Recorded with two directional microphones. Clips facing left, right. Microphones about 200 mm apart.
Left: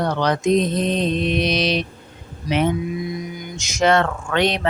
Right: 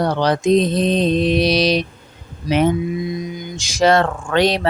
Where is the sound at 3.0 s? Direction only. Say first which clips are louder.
Right 3 dB; 20° right (ahead or behind).